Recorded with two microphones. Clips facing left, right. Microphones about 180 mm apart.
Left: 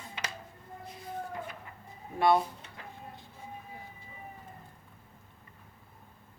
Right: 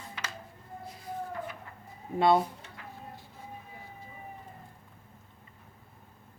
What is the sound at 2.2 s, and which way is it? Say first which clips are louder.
Speech: right 1 dB; 20° right (ahead or behind).